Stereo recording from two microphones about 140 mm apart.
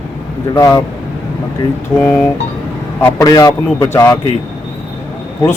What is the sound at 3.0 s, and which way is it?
A man's voice, 20° left (ahead or behind).